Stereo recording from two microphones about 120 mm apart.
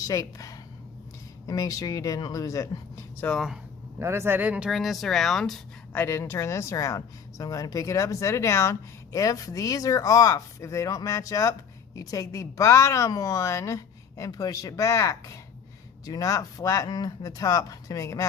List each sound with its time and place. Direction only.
0.0 s speech: 30° left (ahead or behind)
3.2 s speech: 5° left (ahead or behind)
4.0 s speech: 20° right (ahead or behind); by 18.3 s 25° left (ahead or behind)